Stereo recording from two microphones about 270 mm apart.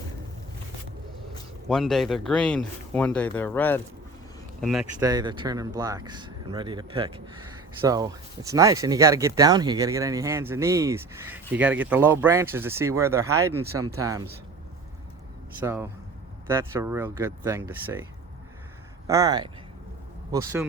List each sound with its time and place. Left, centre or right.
1.6 s speech: centre
5.0 s speech: centre
15.6 s speech: centre
19.0 s speech: centre